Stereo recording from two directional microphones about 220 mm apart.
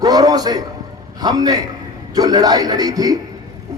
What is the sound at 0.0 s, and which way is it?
A man's voice, 15° right (ahead or behind).